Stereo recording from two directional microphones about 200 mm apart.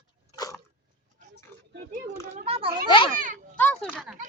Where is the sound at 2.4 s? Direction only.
30° right (ahead or behind).